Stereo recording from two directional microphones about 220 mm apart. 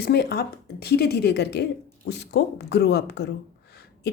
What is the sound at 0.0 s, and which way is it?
Speech, 45° left (ahead or behind).